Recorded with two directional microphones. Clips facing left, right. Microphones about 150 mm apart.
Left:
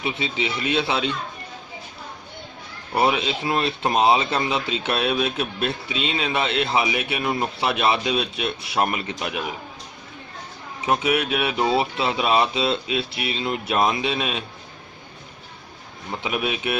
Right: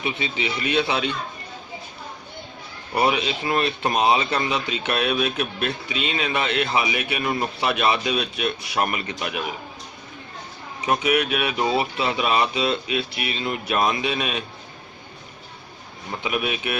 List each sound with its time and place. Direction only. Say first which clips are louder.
0.0 s speech: left 1 dB; 25° left (ahead or behind)
3.1 s speech: even; 25° left (ahead or behind)
10.8 s speech: even; 25° left (ahead or behind)
16.2 s speech: even; 25° left (ahead or behind)